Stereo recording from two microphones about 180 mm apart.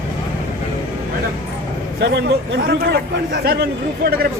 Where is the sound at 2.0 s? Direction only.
70° right (ahead or behind).